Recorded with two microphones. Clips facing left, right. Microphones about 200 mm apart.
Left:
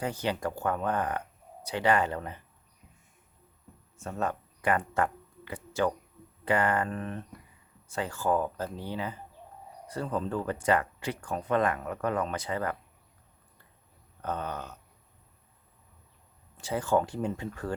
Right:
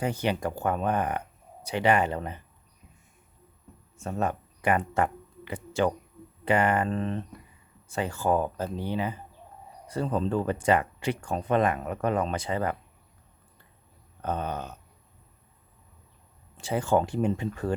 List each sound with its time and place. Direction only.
0.0 s speech: 15° right (ahead or behind)
4.0 s speech: 15° right (ahead or behind)
14.2 s speech: 20° right (ahead or behind)
16.6 s speech: 25° right (ahead or behind)